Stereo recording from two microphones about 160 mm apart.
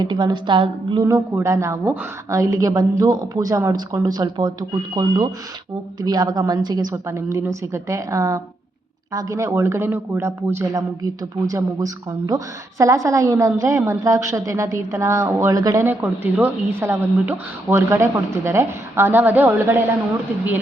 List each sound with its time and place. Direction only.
0.0 s a woman's voice: 25° right (ahead or behind)
1.0 s a woman's voice: 20° right (ahead or behind)